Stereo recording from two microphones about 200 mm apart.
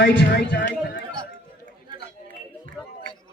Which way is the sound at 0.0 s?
65° left (ahead or behind).